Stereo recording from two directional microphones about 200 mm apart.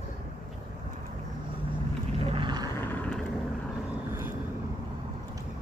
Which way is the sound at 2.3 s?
25° right (ahead or behind).